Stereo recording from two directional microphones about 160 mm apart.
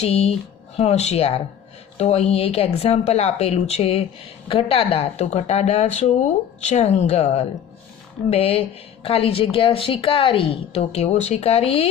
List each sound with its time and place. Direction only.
0.0 s a woman's voice: 40° left (ahead or behind)